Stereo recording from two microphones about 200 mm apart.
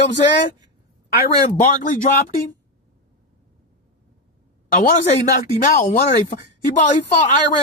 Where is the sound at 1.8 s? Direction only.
40° left (ahead or behind).